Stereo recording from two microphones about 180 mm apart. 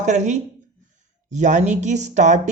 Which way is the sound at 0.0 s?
40° right (ahead or behind).